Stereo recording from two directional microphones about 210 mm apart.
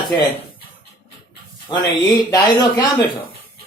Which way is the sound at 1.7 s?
20° left (ahead or behind).